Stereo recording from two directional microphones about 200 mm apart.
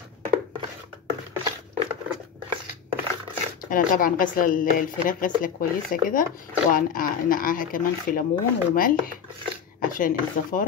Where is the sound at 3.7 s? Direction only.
45° left (ahead or behind).